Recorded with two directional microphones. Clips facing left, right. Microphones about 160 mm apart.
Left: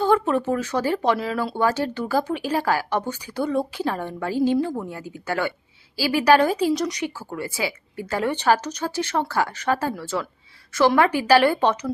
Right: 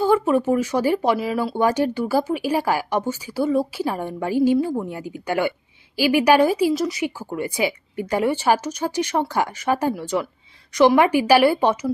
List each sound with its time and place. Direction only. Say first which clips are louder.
0.0 s speech: right 2 dB; 10° right (ahead or behind)
7.2 s speech: right 4 dB; 15° right (ahead or behind)